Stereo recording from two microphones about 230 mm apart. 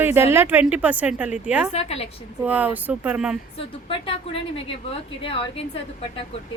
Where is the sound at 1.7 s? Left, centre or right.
Left.